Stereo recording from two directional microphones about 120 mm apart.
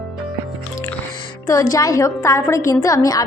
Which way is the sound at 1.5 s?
30° left (ahead or behind).